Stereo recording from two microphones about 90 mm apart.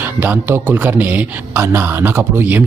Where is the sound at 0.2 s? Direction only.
20° right (ahead or behind).